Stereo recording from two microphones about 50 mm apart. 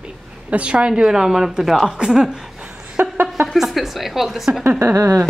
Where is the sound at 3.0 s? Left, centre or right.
Right.